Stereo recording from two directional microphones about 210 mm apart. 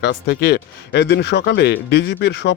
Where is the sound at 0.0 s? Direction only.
55° left (ahead or behind).